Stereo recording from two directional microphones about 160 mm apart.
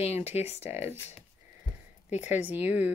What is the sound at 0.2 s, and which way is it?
Speech, 45° left (ahead or behind).